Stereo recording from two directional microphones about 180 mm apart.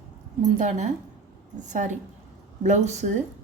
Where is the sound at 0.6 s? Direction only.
40° right (ahead or behind).